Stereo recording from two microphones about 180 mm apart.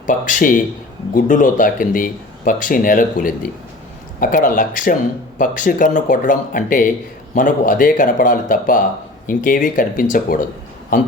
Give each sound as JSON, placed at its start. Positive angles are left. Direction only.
{"t": 0.1, "sound": "speech", "side_deg": 50}